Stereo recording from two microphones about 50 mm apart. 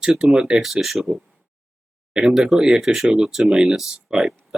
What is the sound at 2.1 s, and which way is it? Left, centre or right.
Speech, centre.